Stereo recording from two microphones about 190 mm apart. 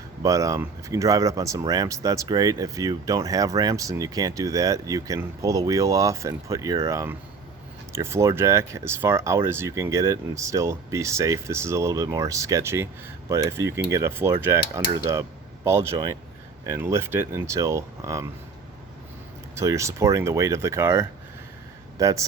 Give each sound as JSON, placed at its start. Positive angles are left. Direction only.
{"t": 0.2, "sound": "speech", "side_deg": -15}
{"t": 19.5, "sound": "speech", "side_deg": -15}